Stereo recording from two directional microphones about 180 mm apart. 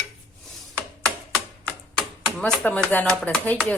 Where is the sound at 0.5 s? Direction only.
Centre (ahead or behind).